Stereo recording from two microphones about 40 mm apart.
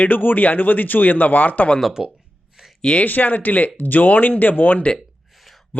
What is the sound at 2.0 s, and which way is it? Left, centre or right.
Speech, centre.